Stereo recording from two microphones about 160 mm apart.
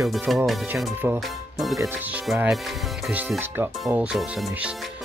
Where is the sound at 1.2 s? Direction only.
Centre (ahead or behind).